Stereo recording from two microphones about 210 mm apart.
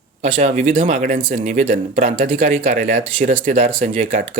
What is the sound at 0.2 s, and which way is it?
Speech, 35° right (ahead or behind).